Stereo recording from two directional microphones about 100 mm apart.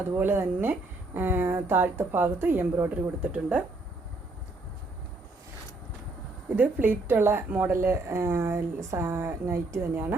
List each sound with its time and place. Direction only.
0.1 s speech: 25° right (ahead or behind)
6.6 s speech: 20° right (ahead or behind)